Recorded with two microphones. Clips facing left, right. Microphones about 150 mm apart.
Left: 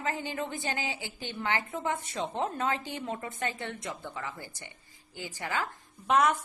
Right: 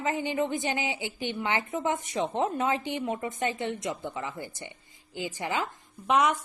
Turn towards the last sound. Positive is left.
turn(degrees=-10)  # may be behind; listen again after turning